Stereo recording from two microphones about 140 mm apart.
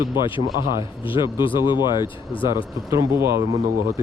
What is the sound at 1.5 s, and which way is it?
Speech, 30° left (ahead or behind).